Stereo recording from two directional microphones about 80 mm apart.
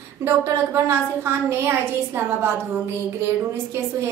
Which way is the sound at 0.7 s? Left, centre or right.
Right.